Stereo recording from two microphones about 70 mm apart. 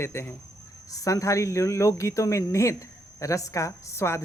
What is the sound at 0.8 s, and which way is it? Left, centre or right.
Speech, left.